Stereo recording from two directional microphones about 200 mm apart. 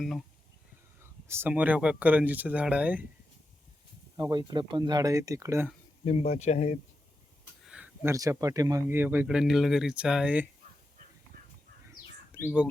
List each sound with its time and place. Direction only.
1.0 s speech: 10° right (ahead or behind)
4.2 s speech: 20° right (ahead or behind)
6.1 s speech: 30° left (ahead or behind)
7.6 s a sound: 5° right (ahead or behind)
8.1 s speech: 15° right (ahead or behind)
12.3 s bird: 5° right (ahead or behind)